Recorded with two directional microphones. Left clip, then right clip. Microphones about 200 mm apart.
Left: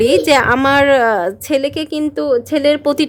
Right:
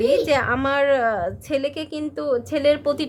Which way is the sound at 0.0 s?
55° left (ahead or behind).